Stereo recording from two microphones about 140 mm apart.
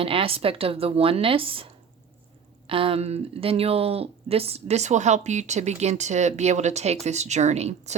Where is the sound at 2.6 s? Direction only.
40° right (ahead or behind).